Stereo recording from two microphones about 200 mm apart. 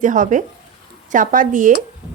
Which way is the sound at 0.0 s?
40° right (ahead or behind).